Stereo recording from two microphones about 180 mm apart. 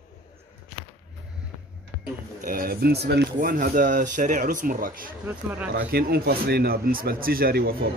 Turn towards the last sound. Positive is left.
turn(degrees=-55)  # may be behind; listen again after turning